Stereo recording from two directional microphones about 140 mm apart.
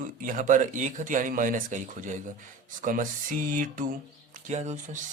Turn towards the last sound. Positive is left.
turn(degrees=-60)  # may be behind; listen again after turning